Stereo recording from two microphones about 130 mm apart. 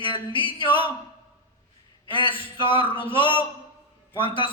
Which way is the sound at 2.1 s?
40° left (ahead or behind).